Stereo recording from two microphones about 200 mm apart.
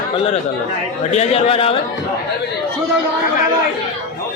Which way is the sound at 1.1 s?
30° left (ahead or behind).